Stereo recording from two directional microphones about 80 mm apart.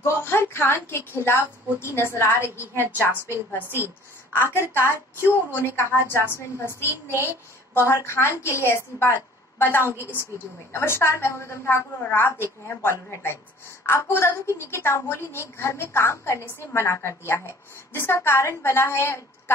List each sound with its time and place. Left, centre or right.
0.0 s a woman's voice: left
4.3 s a woman's voice: left